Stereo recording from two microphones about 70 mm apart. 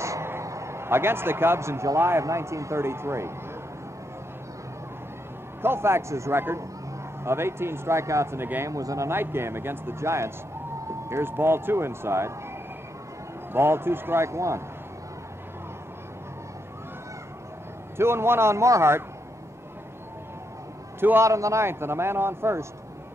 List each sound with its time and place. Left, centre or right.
0.0 s a sound: right
2.0 s a man's voice: right
5.6 s a man's voice: right
9.1 s a man's voice: right
13.5 s a man's voice: right
17.9 s a man's voice: right
21.0 s a man's voice: right
21.3 s a man's voice: right